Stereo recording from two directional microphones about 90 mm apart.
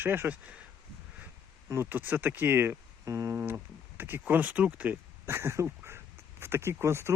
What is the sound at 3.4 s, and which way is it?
Speech, 20° right (ahead or behind).